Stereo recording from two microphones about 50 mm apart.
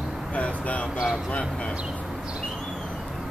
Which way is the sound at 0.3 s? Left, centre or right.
Left.